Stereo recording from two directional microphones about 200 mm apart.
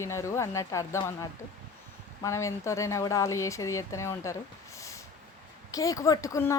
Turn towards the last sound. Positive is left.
turn(degrees=15)  # may be behind; listen again after turning